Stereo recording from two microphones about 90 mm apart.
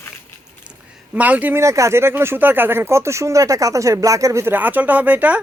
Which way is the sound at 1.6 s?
35° right (ahead or behind).